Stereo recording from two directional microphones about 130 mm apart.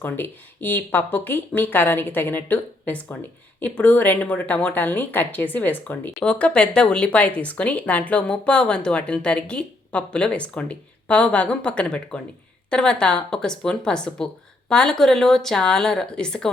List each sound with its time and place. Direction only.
0.0 s speech: 15° left (ahead or behind)